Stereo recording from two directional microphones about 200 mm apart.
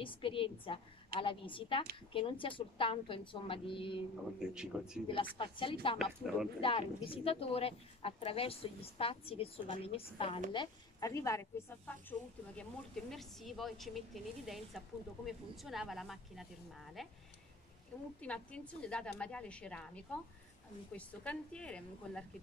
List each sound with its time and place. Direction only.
0.0 s a woman's voice: 25° left (ahead or behind)
4.6 s a woman's voice: 5° right (ahead or behind)
5.0 s a woman's voice: 25° left (ahead or behind)
5.9 s a woman's voice: centre (ahead or behind)
6.6 s a woman's voice: 25° left (ahead or behind); by 16.4 s centre (ahead or behind)
18.2 s a woman's voice: 5° left (ahead or behind)